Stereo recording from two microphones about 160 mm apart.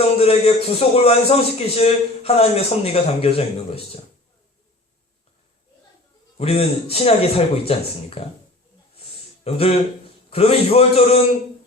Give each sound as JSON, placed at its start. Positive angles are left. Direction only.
{"t": 0.0, "sound": "a man's voice", "side_deg": 40}
{"t": 6.3, "sound": "a man's voice", "side_deg": 40}
{"t": 9.4, "sound": "a man's voice", "side_deg": 40}